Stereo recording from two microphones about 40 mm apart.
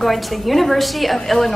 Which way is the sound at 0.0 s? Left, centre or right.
Centre.